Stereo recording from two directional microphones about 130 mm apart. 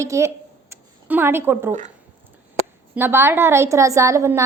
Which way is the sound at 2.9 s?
15° right (ahead or behind).